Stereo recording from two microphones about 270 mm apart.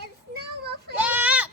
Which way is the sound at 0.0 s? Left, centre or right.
Right.